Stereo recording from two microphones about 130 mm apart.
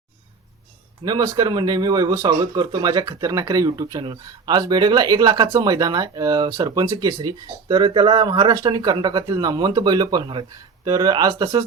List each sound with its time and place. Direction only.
1.0 s speech: 25° right (ahead or behind)